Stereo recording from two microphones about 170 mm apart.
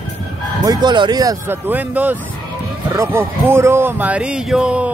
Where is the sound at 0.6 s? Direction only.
25° right (ahead or behind).